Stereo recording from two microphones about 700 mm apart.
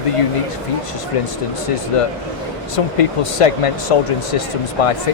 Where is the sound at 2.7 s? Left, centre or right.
Left.